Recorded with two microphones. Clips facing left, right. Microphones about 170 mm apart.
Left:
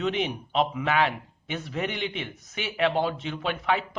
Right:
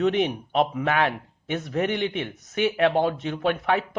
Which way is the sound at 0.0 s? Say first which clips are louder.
Right 5 dB; 55° right (ahead or behind).